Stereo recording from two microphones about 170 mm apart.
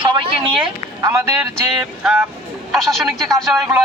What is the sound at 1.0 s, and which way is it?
Speech, 20° right (ahead or behind).